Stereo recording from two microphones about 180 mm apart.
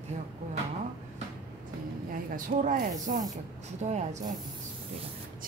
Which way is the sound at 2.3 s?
45° right (ahead or behind).